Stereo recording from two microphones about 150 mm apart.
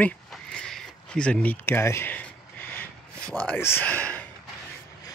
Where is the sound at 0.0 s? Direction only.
5° left (ahead or behind).